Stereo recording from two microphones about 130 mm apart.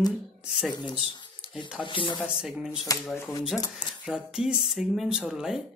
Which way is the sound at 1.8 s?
40° left (ahead or behind).